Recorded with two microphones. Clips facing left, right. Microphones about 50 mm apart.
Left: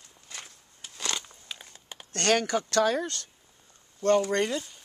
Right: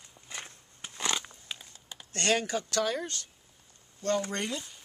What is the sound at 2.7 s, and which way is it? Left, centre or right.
Speech, left.